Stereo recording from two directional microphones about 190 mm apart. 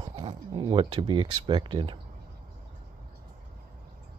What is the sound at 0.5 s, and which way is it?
Speech, 25° right (ahead or behind).